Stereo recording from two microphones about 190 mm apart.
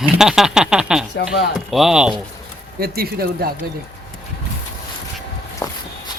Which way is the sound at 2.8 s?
55° right (ahead or behind).